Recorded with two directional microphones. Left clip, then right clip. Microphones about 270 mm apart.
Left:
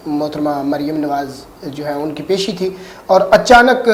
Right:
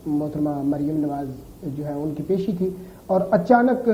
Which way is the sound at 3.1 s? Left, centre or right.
Centre.